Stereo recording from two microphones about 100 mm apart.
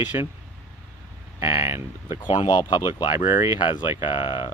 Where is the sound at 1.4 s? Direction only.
60° left (ahead or behind).